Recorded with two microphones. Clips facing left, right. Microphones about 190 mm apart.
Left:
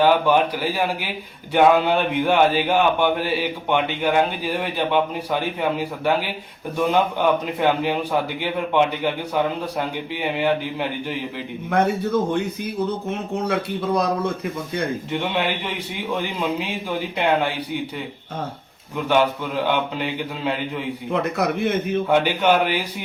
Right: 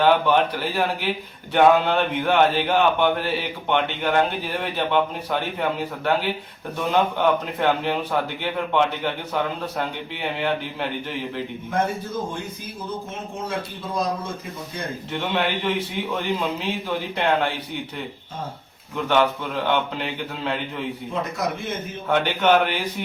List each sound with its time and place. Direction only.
0.0 s speech: 10° left (ahead or behind)
11.7 s speech: 65° left (ahead or behind)
15.1 s speech: 15° left (ahead or behind)
19.6 s speech: 10° left (ahead or behind)
21.1 s a man's voice: 65° left (ahead or behind)
22.1 s speech: 10° left (ahead or behind)